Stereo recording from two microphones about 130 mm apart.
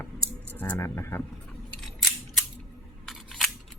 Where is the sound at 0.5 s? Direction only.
15° left (ahead or behind).